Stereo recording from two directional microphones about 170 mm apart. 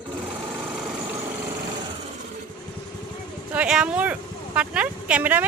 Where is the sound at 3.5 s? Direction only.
5° right (ahead or behind).